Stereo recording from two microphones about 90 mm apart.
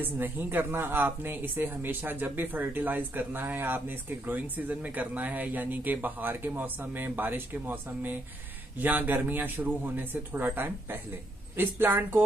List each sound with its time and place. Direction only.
0.0 s speech: 20° right (ahead or behind)